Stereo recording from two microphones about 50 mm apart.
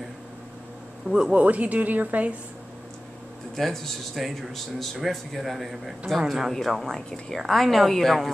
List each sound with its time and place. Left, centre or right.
1.0 s a man's voice: centre
1.3 s a woman's voice: right
3.5 s speech: centre
6.5 s speech: centre